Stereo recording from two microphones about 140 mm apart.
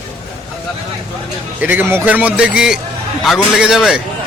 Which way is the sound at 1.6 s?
15° right (ahead or behind).